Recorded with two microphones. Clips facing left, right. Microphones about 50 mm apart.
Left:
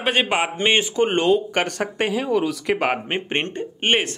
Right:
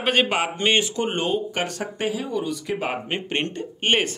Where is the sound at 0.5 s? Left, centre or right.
Centre.